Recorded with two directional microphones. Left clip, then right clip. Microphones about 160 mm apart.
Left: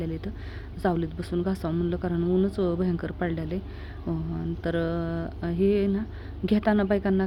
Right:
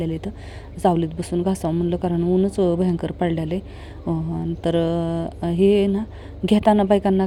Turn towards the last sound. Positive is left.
turn(degrees=-35)  # may be behind; listen again after turning